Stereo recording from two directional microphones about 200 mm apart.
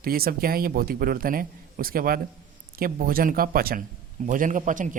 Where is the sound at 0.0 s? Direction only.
45° right (ahead or behind).